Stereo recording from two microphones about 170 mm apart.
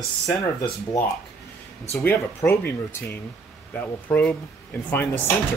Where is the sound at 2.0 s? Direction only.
10° left (ahead or behind).